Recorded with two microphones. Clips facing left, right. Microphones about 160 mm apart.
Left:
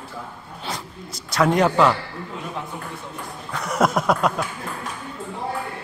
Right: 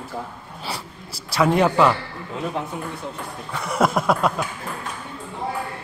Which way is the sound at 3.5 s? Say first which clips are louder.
Even; centre (ahead or behind).